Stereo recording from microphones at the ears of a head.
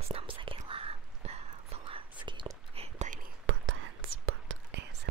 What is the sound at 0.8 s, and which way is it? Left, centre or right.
Whispering, right.